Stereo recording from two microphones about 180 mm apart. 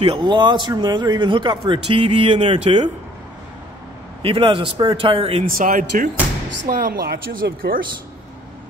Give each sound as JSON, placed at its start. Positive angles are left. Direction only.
{"t": 0.0, "sound": "a man's voice", "side_deg": -30}
{"t": 4.2, "sound": "a man's voice", "side_deg": -30}
{"t": 5.4, "sound": "speech", "side_deg": -50}